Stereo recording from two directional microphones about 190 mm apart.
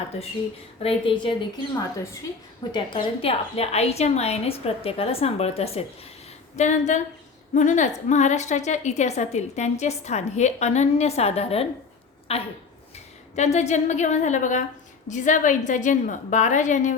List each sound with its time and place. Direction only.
0.8 s a woman's voice: 30° left (ahead or behind)